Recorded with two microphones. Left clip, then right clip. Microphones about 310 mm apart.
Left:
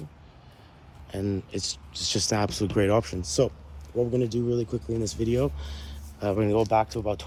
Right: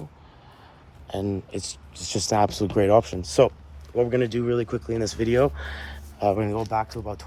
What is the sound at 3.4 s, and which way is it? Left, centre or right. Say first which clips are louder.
Speech: right 7 dB; centre.